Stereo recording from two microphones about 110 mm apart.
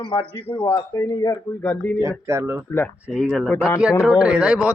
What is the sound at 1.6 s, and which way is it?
Speech, 10° left (ahead or behind).